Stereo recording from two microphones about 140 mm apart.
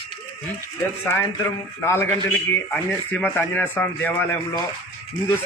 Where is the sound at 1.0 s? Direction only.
20° left (ahead or behind).